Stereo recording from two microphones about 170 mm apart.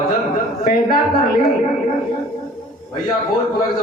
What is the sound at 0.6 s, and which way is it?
Speech, 60° left (ahead or behind).